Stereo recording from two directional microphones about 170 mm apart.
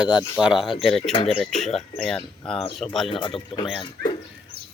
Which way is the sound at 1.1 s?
30° left (ahead or behind).